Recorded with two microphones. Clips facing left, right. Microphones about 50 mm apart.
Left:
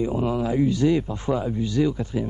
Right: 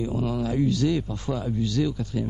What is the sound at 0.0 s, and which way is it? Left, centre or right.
Speech, left.